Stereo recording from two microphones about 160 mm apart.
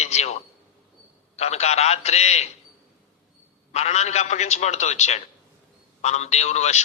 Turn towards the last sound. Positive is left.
turn(degrees=45)  # may be behind; listen again after turning